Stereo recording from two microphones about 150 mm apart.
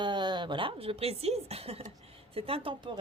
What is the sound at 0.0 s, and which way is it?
A woman's voice, 30° right (ahead or behind).